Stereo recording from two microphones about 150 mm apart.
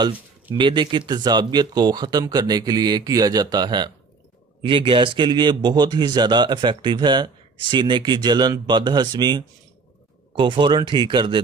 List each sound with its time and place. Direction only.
0.6 s a man's voice: 30° right (ahead or behind)